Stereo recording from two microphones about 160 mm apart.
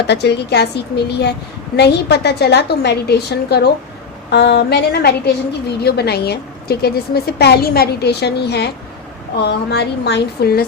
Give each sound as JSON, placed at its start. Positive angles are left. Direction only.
{"t": 0.1, "sound": "a woman's voice", "side_deg": 90}